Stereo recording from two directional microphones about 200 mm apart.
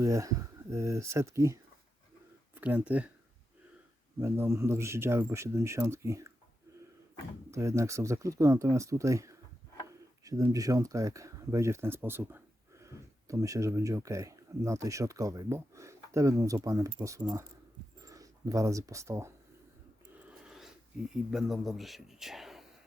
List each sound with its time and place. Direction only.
0.0 s a man's voice: 15° right (ahead or behind)
2.6 s a man's voice: 5° right (ahead or behind)
4.2 s a man's voice: 10° right (ahead or behind)
7.5 s a man's voice: 15° right (ahead or behind)
20.2 s a sound: 5° right (ahead or behind)
21.1 s speech: centre (ahead or behind)